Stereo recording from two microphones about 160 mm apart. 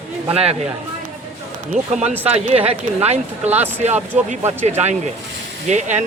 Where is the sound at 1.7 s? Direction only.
50° right (ahead or behind).